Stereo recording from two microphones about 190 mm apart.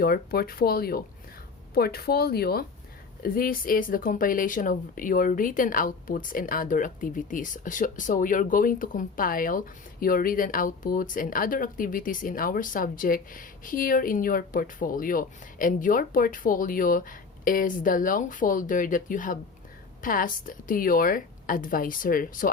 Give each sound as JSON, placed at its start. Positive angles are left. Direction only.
{"t": 0.0, "sound": "a woman's voice", "side_deg": 50}